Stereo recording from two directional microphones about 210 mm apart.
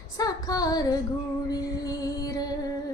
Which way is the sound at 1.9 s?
15° left (ahead or behind).